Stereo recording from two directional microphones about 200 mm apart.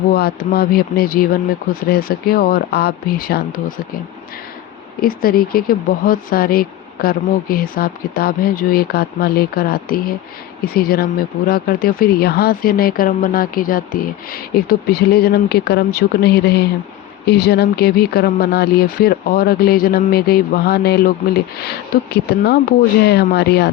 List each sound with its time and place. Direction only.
0.1 s speech: 50° left (ahead or behind)
4.9 s speech: 45° left (ahead or behind)